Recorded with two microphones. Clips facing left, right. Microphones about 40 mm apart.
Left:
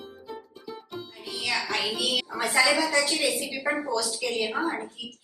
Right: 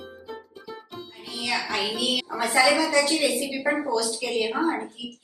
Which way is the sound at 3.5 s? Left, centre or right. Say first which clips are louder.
Right 3 dB; centre.